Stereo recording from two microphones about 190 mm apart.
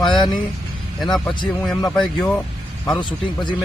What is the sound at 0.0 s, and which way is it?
Vehicle, centre (ahead or behind).